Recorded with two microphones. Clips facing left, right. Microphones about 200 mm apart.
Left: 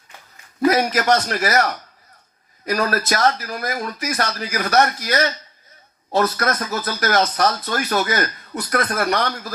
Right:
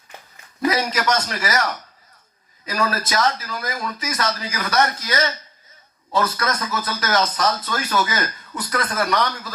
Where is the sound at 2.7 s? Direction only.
60° left (ahead or behind).